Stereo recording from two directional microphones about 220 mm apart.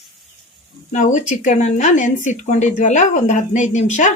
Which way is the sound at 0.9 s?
35° left (ahead or behind).